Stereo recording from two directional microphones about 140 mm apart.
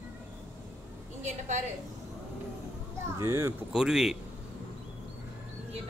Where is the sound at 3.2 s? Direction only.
15° right (ahead or behind).